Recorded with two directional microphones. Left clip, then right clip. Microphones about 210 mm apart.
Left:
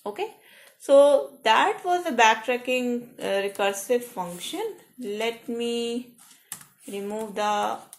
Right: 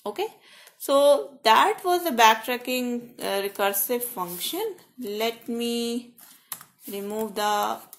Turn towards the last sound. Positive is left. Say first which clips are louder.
# right 1 dB
turn(degrees=-35)  # may be behind; listen again after turning